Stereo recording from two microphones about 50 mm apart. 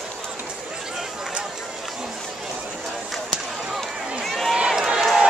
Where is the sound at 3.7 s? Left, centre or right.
Centre.